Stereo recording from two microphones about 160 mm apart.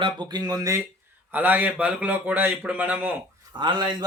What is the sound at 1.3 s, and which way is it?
A man's voice, 10° right (ahead or behind).